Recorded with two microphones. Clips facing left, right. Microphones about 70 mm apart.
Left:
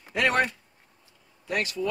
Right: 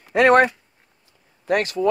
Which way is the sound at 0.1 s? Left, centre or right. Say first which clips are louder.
Right 10 dB; right.